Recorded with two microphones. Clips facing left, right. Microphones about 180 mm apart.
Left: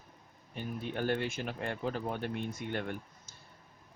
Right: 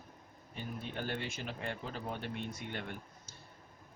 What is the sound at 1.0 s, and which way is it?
Speech, 55° left (ahead or behind).